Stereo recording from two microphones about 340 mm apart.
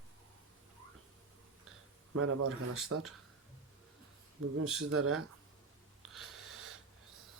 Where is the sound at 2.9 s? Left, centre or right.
Right.